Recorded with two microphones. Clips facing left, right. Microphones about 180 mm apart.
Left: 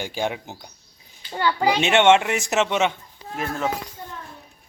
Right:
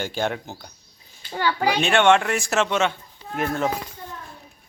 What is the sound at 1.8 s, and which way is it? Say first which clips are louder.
Speech: left 1 dB; 20° left (ahead or behind).